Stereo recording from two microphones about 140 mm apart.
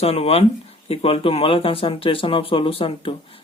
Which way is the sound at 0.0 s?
45° left (ahead or behind).